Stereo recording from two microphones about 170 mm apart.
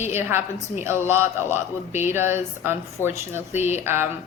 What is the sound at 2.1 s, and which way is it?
Speech, 15° right (ahead or behind).